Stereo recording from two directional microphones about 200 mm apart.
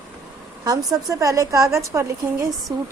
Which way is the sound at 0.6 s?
15° right (ahead or behind).